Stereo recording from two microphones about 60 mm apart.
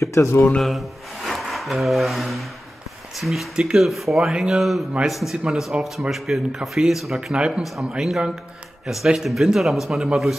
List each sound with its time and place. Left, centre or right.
0.0 s speech: left
0.6 s speech: centre
3.5 s speech: centre
3.8 s speech: centre
7.3 s speech: centre